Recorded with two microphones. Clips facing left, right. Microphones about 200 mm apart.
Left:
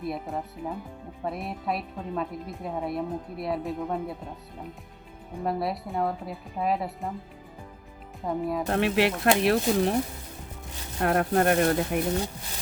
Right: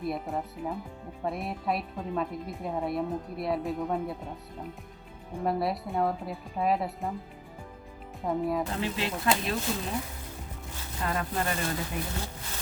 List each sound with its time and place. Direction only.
0.0 s a woman's voice: centre (ahead or behind)
5.4 s a woman's voice: centre (ahead or behind)
8.2 s a woman's voice: centre (ahead or behind)
8.6 s speech: 75° left (ahead or behind)
11.0 s speech: 65° left (ahead or behind)